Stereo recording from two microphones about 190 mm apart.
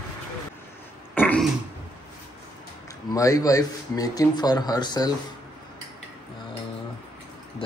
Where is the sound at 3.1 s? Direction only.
20° left (ahead or behind).